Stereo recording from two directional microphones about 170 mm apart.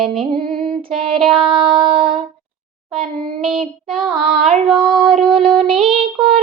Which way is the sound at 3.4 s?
Centre (ahead or behind).